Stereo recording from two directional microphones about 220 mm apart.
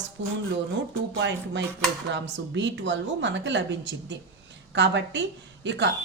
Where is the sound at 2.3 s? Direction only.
55° right (ahead or behind).